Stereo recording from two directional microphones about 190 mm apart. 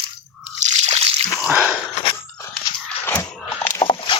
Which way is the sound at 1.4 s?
5° right (ahead or behind).